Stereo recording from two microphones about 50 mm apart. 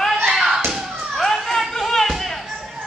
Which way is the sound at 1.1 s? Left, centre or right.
Centre.